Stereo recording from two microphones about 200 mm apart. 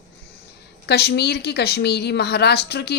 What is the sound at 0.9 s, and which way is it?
A woman's voice, 55° left (ahead or behind).